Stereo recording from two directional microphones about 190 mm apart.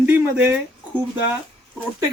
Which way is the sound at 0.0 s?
5° right (ahead or behind).